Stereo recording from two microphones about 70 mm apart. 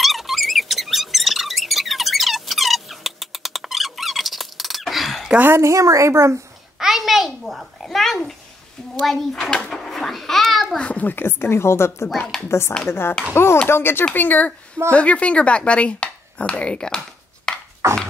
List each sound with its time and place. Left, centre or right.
0.0 s squeak: centre
5.6 s a woman's voice: right
6.8 s a sound: centre
7.8 s a child's voice: centre
10.8 s a woman's voice: centre
17.5 s a sound: centre
17.8 s dog: right